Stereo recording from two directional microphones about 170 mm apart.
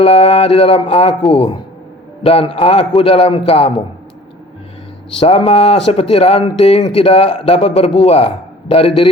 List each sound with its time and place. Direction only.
0.0 s speech: 35° left (ahead or behind)
5.2 s speech: 35° left (ahead or behind)